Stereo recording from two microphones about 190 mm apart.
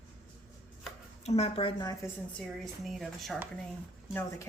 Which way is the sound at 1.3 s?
35° left (ahead or behind).